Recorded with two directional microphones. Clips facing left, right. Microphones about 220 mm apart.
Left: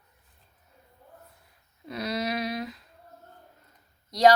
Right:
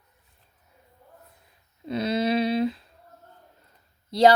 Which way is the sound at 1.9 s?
25° right (ahead or behind).